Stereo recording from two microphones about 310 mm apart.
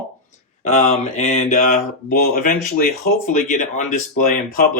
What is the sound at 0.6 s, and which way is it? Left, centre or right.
Speech, left.